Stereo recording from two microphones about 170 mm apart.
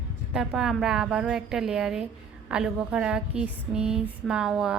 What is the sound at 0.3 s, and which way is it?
A woman's voice, centre (ahead or behind).